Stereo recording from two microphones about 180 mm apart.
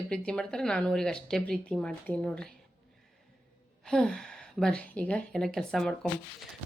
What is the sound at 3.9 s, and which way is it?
Speech, 5° left (ahead or behind).